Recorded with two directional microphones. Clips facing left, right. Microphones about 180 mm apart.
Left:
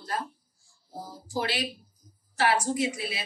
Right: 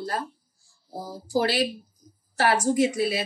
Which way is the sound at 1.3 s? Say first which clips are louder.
Right 7 dB; 35° right (ahead or behind).